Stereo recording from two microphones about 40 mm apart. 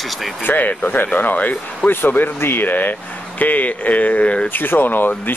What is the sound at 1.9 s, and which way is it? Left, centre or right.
Speech, left.